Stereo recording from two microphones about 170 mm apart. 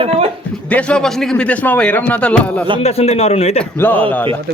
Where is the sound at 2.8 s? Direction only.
35° left (ahead or behind).